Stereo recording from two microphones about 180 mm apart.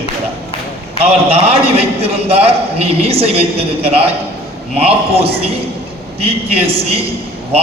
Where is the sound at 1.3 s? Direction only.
35° right (ahead or behind).